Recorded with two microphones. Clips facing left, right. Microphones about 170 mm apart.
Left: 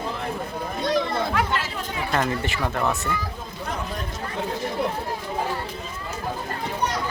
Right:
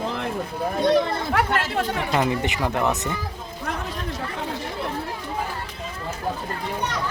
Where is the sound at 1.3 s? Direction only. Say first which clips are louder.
Right 3 dB; 60° right (ahead or behind).